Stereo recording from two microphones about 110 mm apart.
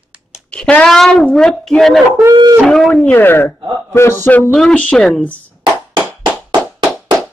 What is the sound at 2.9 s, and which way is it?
Speech, 15° left (ahead or behind).